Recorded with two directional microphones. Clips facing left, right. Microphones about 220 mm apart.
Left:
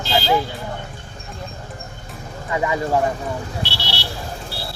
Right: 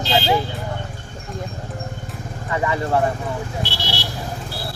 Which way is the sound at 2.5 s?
15° left (ahead or behind).